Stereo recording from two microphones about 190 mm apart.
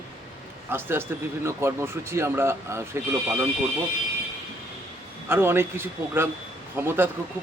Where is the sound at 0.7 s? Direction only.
10° right (ahead or behind).